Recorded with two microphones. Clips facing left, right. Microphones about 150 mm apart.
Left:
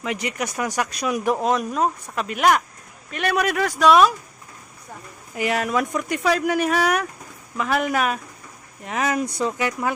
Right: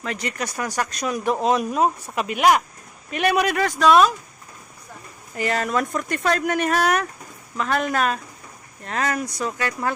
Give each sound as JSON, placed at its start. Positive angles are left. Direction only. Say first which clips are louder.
{"t": 0.0, "sound": "speech", "louder": "left 2 dB", "side_deg": 15}
{"t": 1.5, "sound": "speech", "louder": "right 2 dB", "side_deg": -5}
{"t": 3.4, "sound": "speech", "louder": "even", "side_deg": 0}
{"t": 5.3, "sound": "speech", "louder": "left 1 dB", "side_deg": 10}
{"t": 9.2, "sound": "speech", "louder": "left 3 dB", "side_deg": 30}
{"t": 9.5, "sound": "speech", "louder": "left 1 dB", "side_deg": 15}